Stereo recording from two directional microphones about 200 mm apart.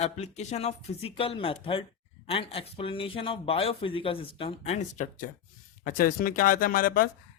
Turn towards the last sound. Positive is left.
turn(degrees=45)  # may be behind; listen again after turning